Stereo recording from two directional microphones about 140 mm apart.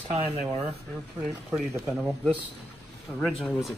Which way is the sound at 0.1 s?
50° right (ahead or behind).